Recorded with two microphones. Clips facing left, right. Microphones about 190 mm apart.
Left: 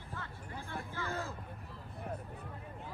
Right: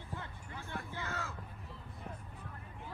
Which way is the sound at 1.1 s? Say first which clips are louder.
Left 4 dB; 35° left (ahead or behind).